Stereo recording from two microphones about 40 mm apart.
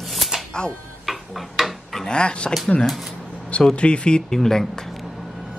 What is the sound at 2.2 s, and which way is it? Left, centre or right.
Speech, left.